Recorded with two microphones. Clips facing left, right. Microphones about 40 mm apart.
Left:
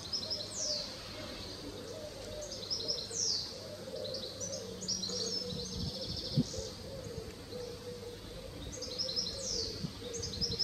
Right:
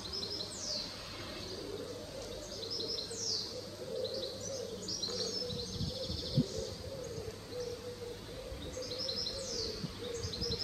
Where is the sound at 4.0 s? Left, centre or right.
Centre.